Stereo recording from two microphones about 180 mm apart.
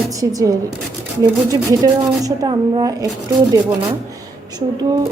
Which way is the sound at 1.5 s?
20° right (ahead or behind).